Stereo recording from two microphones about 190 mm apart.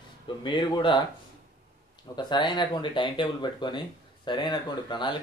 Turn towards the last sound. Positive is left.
turn(degrees=25)  # may be behind; listen again after turning